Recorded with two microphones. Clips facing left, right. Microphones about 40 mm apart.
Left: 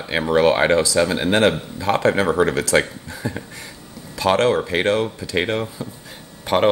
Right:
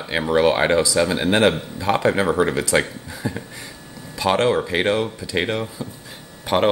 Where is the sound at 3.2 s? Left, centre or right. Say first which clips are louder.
Even; centre.